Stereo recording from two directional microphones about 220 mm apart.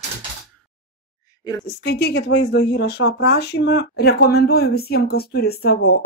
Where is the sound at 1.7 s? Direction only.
45° left (ahead or behind).